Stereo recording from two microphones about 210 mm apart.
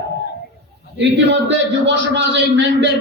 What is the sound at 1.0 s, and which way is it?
A man's voice, 60° right (ahead or behind).